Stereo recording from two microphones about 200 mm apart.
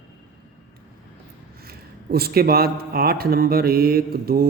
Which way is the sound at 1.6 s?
50° right (ahead or behind).